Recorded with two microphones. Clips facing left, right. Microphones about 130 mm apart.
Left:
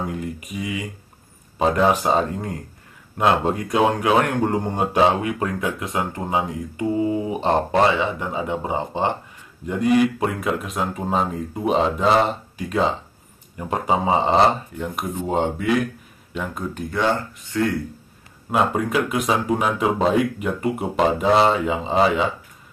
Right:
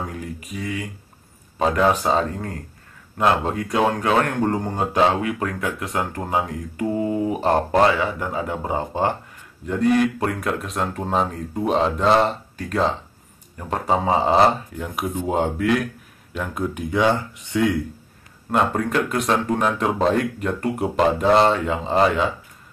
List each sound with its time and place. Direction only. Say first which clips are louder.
0.0 s speech: left 3 dB; centre (ahead or behind)
2.3 s speech: left 2 dB; 15° left (ahead or behind)
3.6 s speech: left 1 dB; 15° left (ahead or behind)
5.4 s speech: left 1 dB; 25° left (ahead or behind)
5.7 s speech: even; 5° left (ahead or behind)
7.9 s speech: even; 20° left (ahead or behind); by 16.6 s centre (ahead or behind)
16.7 s speech: right 2 dB; 15° right (ahead or behind)
18.5 s speech: even; 5° left (ahead or behind)